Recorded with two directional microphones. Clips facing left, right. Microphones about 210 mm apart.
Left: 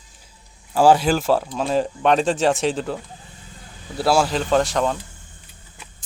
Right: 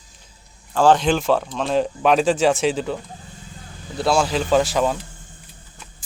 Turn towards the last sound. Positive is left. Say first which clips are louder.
# right 1 dB
turn(degrees=-5)  # may be behind; listen again after turning